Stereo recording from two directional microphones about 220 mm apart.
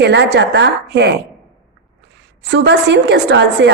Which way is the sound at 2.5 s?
50° right (ahead or behind).